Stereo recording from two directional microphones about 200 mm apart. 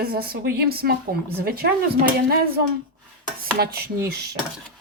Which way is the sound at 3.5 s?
50° right (ahead or behind).